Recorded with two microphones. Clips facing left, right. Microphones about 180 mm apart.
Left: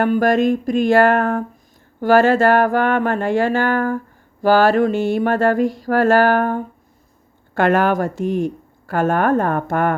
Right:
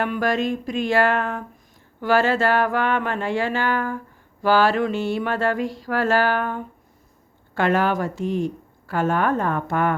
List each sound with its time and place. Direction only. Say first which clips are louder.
0.0 s speech: left 7 dB; 45° left (ahead or behind)